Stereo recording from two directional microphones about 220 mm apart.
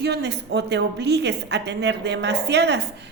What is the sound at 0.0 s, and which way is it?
A woman's voice, 50° right (ahead or behind).